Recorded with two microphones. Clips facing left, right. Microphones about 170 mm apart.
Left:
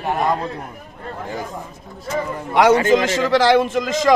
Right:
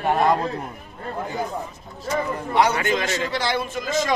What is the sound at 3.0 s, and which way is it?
Speech, 90° left.